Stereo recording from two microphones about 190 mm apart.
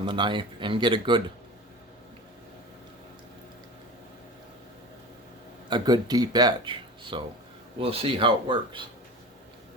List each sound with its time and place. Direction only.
0.0 s speech: 25° right (ahead or behind)
5.6 s speech: 25° right (ahead or behind)